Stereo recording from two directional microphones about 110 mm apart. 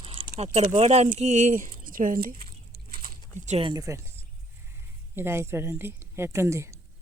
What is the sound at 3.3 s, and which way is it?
Speech, 90° right.